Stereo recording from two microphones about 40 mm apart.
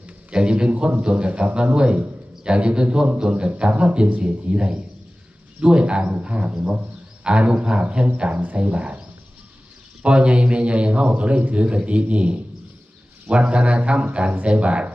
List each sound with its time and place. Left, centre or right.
0.3 s a man's voice: right
10.0 s a man's voice: right